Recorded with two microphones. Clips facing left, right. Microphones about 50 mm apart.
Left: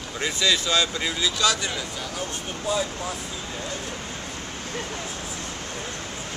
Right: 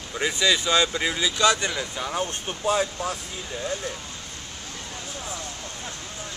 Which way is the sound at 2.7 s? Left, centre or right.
Right.